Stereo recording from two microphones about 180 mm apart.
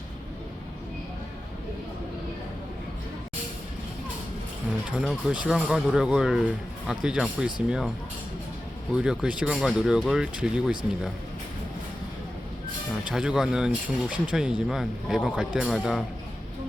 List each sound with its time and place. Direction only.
4.9 s speech: 5° right (ahead or behind)
8.9 s speech: 5° right (ahead or behind)
12.9 s speech: 5° right (ahead or behind)